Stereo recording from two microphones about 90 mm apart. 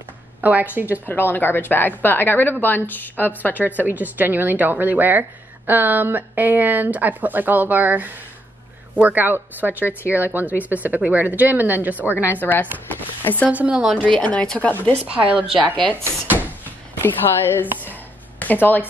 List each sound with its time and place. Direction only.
0.4 s speech: 20° right (ahead or behind)
1.0 s speech: 20° left (ahead or behind)
3.7 s speech: 20° right (ahead or behind)
9.8 s speech: 25° left (ahead or behind)
10.1 s speech: 20° right (ahead or behind)
12.3 s speech: 20° left (ahead or behind)
13.5 s speech: 15° right (ahead or behind)
13.9 s speech: 10° left (ahead or behind)
15.0 s speech: 15° right (ahead or behind)
17.0 s speech: 25° left (ahead or behind)